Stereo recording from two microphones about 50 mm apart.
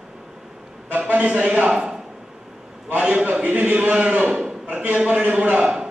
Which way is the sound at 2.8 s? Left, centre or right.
Right.